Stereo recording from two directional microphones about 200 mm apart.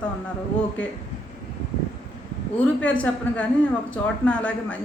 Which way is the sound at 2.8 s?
5° left (ahead or behind).